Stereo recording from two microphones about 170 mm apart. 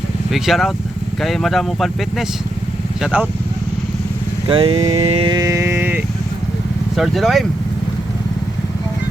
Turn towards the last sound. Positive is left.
turn(degrees=0)  # may be behind; listen again after turning